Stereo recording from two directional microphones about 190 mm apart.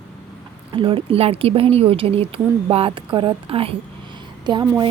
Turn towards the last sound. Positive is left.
turn(degrees=-25)  # may be behind; listen again after turning